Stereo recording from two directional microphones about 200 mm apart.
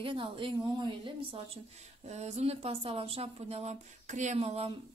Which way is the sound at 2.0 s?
35° right (ahead or behind).